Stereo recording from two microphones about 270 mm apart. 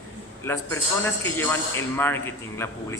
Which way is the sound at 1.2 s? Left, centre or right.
Centre.